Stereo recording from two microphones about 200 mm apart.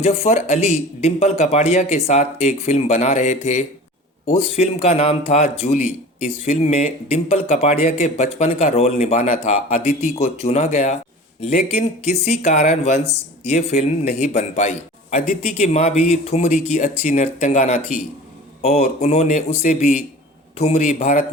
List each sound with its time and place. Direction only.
0.0 s speech: 30° left (ahead or behind)